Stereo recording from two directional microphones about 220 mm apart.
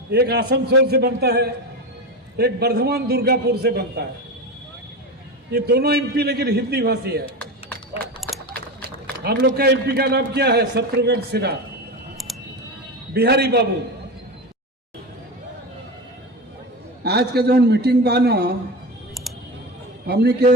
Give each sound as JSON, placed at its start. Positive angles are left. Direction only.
{"t": 0.1, "sound": "a man's voice", "side_deg": -45}
{"t": 5.5, "sound": "a man's voice", "side_deg": -45}
{"t": 8.5, "sound": "speech", "side_deg": -45}
{"t": 13.1, "sound": "a man's voice", "side_deg": -45}
{"t": 17.0, "sound": "a man's voice", "side_deg": -50}
{"t": 20.1, "sound": "a man's voice", "side_deg": -50}